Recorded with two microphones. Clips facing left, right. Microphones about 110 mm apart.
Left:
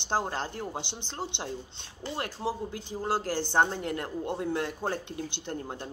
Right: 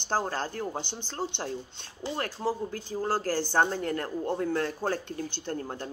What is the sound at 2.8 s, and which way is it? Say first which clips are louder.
Speech: right 1 dB; 20° left (ahead or behind).